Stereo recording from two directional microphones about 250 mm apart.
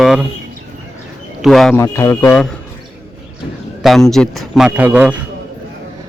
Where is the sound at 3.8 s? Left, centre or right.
Centre.